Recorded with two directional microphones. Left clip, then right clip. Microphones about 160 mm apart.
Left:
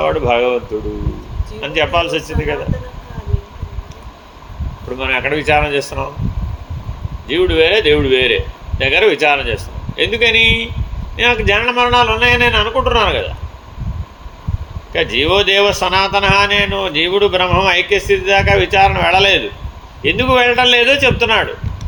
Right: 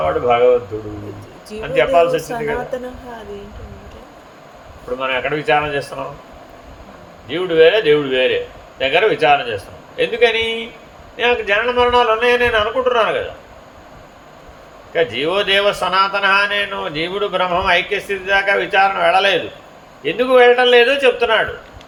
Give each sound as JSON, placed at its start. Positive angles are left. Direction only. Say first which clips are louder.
{"t": 0.0, "sound": "a man's voice", "louder": "even", "side_deg": 65}
{"t": 1.7, "sound": "a man's voice", "louder": "right 2 dB", "side_deg": 60}
{"t": 4.9, "sound": "a man's voice", "louder": "left 3 dB", "side_deg": 55}
{"t": 7.3, "sound": "a man's voice", "louder": "even", "side_deg": 50}
{"t": 14.9, "sound": "a man's voice", "louder": "left 3 dB", "side_deg": 60}